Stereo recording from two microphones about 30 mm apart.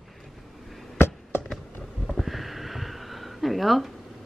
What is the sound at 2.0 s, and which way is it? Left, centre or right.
Sniff, centre.